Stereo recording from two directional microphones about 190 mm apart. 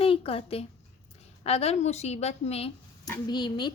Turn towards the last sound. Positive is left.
turn(degrees=25)  # may be behind; listen again after turning